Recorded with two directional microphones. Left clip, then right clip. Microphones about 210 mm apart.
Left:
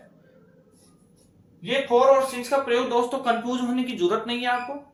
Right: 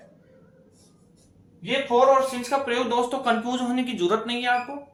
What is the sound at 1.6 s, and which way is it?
Speech, 15° right (ahead or behind).